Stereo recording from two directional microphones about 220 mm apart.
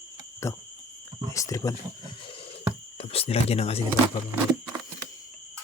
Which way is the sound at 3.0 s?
25° left (ahead or behind).